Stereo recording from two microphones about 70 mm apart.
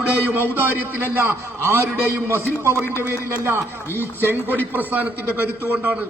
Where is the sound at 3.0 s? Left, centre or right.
Right.